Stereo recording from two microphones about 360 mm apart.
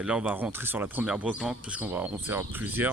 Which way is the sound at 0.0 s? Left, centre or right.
Centre.